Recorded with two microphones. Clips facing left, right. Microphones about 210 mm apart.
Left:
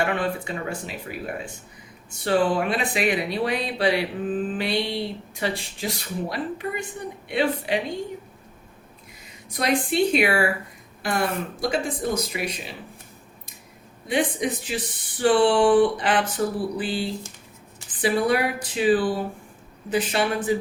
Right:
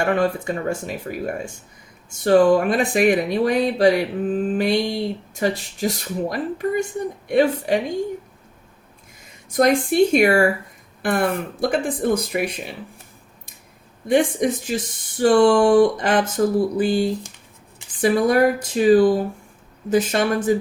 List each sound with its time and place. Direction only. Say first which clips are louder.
0.0 s speech: right 5 dB; 45° right (ahead or behind)
9.5 s speech: right 6 dB; 45° right (ahead or behind)
14.1 s speech: right 6 dB; 45° right (ahead or behind)